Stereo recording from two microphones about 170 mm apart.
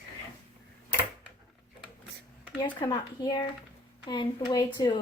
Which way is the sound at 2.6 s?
25° left (ahead or behind).